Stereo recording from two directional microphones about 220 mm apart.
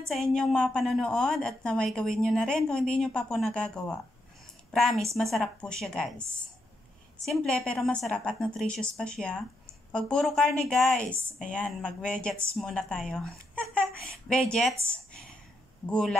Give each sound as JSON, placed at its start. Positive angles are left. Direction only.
{"t": 0.1, "sound": "a woman's voice", "side_deg": 0}
{"t": 7.2, "sound": "a woman's voice", "side_deg": 5}
{"t": 14.9, "sound": "a sound", "side_deg": 5}
{"t": 15.9, "sound": "a woman's voice", "side_deg": 5}